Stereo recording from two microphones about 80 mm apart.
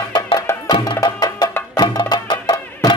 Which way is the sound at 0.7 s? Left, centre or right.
Left.